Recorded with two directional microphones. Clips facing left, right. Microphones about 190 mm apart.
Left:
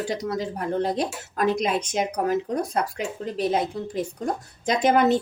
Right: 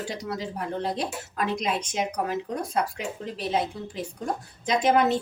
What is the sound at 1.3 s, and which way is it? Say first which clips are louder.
Speech: left 5 dB; 45° left (ahead or behind).